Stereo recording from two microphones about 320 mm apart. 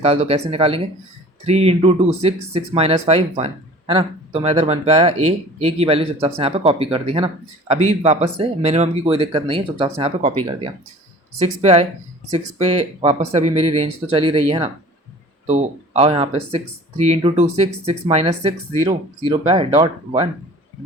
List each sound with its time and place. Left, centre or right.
0.0 s speech: centre
11.3 s speech: centre